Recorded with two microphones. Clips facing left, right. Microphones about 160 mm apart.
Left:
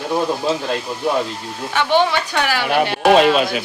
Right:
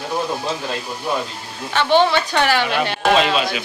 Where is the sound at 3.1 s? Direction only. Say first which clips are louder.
Left 5 dB; 50° left (ahead or behind).